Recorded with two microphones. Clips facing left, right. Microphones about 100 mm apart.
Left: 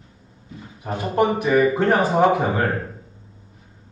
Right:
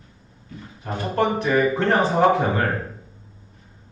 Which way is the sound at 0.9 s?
10° left (ahead or behind).